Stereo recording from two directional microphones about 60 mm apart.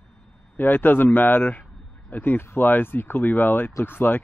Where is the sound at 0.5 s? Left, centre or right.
Left.